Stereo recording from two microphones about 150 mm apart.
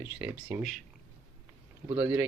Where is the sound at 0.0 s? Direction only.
15° right (ahead or behind).